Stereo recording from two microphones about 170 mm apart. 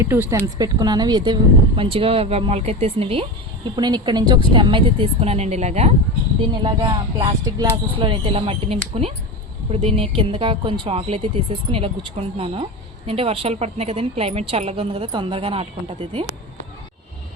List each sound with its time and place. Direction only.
0.0 s a woman's voice: 15° right (ahead or behind); by 5.9 s 40° right (ahead or behind)
6.5 s a woman's voice: 30° right (ahead or behind)